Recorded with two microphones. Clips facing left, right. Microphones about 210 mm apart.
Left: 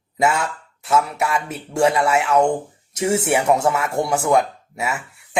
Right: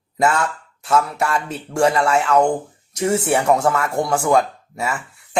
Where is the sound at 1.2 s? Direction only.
Centre (ahead or behind).